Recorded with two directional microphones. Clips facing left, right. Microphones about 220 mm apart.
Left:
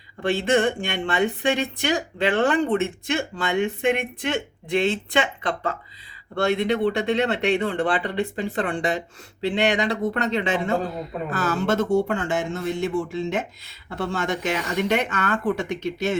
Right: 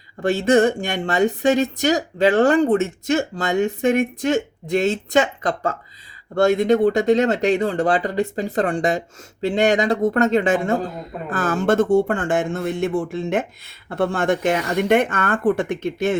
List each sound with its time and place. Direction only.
0.2 s speech: 45° right (ahead or behind)